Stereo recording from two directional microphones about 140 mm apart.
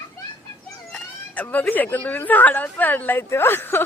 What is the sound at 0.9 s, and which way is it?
Speech, 10° left (ahead or behind).